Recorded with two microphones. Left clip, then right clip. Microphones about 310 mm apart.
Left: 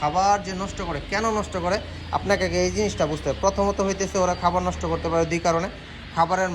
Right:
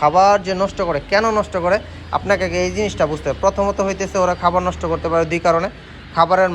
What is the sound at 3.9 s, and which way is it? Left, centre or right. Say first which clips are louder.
A man's voice: right 5 dB; centre.